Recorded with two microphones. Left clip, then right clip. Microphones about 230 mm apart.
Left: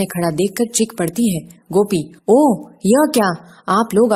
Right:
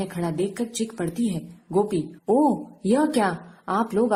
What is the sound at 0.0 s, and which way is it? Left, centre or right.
A woman's voice, left.